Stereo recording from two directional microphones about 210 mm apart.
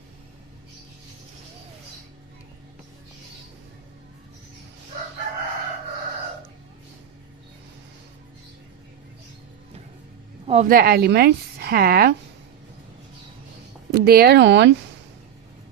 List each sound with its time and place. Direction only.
10.4 s a sound: 30° right (ahead or behind)
10.7 s a woman's voice: 45° right (ahead or behind)
13.9 s speech: 50° right (ahead or behind)